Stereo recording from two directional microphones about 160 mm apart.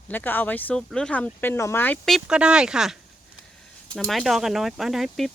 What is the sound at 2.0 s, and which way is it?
Speech, centre (ahead or behind).